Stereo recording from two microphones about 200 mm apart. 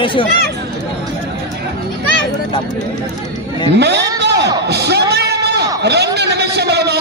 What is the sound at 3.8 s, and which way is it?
Speech, 55° right (ahead or behind).